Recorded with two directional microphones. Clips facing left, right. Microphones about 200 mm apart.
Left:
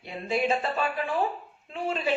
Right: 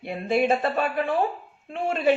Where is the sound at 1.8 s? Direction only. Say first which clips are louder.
Right 4 dB; 55° right (ahead or behind).